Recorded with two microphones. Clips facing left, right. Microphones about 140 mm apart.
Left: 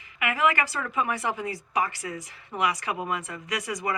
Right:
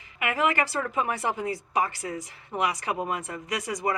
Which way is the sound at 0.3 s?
35° right (ahead or behind).